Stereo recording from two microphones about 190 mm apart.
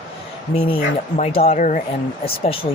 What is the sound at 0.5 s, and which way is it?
Speech, 30° left (ahead or behind).